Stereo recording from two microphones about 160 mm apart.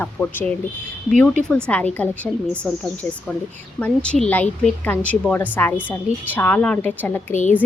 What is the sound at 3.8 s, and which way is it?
A woman's voice, 5° left (ahead or behind).